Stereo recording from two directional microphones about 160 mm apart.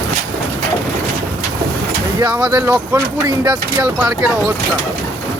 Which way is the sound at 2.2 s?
10° right (ahead or behind).